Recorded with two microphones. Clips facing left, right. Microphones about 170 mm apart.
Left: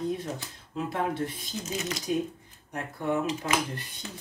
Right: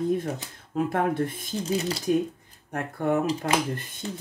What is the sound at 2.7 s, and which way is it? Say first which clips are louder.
Speech: right 4 dB; 55° right (ahead or behind).